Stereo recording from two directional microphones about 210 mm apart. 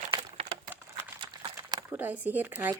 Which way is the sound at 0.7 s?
10° right (ahead or behind).